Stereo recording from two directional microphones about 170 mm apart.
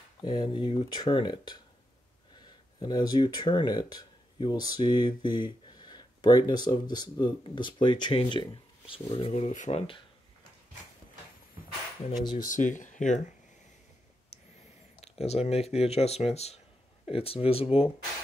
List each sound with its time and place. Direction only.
0.2 s speech: 25° left (ahead or behind)
12.4 s speech: 50° left (ahead or behind)
14.3 s a sound: 40° left (ahead or behind)
15.0 s speech: 40° left (ahead or behind)